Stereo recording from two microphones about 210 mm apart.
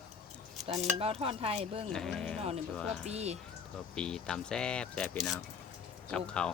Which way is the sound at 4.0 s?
5° left (ahead or behind).